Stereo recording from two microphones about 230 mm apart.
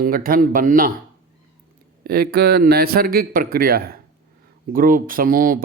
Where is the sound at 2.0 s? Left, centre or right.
Right.